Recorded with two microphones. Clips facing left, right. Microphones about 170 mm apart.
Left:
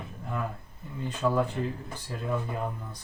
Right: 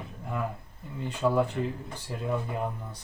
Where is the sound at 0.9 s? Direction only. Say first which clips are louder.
Right 1 dB; 15° right (ahead or behind).